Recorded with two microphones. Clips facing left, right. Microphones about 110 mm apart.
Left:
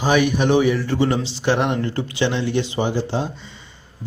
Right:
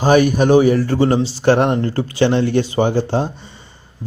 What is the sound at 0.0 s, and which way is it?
A man's voice, 45° right (ahead or behind).